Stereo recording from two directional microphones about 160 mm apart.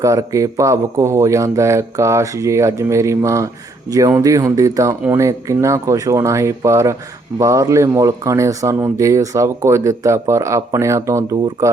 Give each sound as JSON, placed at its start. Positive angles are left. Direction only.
{"t": 0.0, "sound": "speech", "side_deg": -20}